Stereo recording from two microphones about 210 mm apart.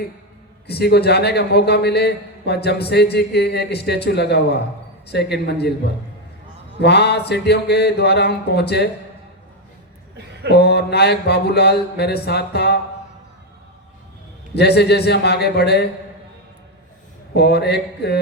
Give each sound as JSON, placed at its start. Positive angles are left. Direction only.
{"t": 0.7, "sound": "a man's voice", "side_deg": 50}
{"t": 6.7, "sound": "a man's voice", "side_deg": 55}
{"t": 10.5, "sound": "a man's voice", "side_deg": 50}
{"t": 14.5, "sound": "a man's voice", "side_deg": 50}
{"t": 17.3, "sound": "a man's voice", "side_deg": 50}